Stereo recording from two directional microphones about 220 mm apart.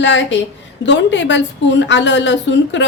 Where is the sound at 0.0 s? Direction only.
55° left (ahead or behind).